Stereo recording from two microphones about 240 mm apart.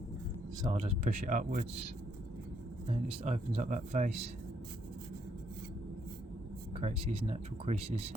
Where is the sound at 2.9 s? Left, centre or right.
Right.